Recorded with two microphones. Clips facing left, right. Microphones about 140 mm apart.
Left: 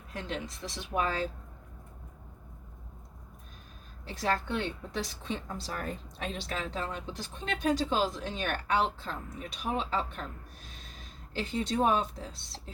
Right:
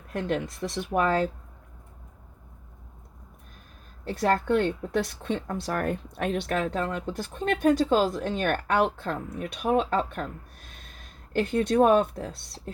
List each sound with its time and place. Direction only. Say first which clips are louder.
0.1 s speech: right 9 dB; 55° right (ahead or behind)
4.0 s a woman's voice: right 7 dB; 55° right (ahead or behind)